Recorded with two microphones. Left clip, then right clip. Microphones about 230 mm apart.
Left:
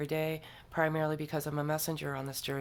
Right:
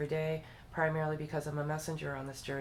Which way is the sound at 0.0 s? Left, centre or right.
Left.